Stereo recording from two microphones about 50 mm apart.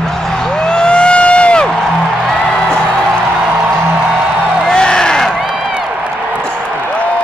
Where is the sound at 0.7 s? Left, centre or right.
Centre.